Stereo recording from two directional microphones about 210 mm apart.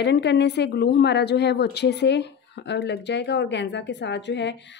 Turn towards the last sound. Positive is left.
turn(degrees=55)  # may be behind; listen again after turning